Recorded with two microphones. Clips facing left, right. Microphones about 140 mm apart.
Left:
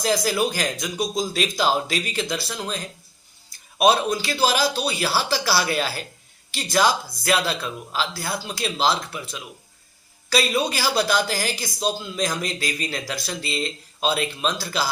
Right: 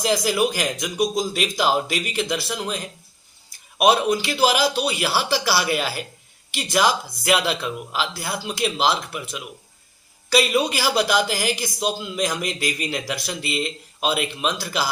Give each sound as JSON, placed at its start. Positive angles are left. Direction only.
{"t": 0.0, "sound": "a man's voice", "side_deg": -15}